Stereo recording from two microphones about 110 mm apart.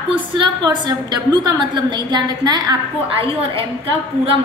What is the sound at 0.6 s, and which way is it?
A woman's voice, 40° right (ahead or behind).